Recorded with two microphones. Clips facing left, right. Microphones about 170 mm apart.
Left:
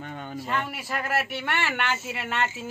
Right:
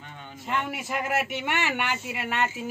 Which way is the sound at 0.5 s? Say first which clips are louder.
Right 2 dB; 20° right (ahead or behind).